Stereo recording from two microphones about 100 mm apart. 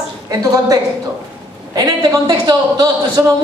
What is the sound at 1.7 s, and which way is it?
A man's voice, 40° right (ahead or behind).